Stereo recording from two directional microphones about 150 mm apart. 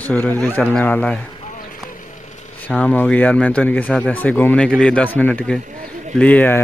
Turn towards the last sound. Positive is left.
turn(degrees=10)  # may be behind; listen again after turning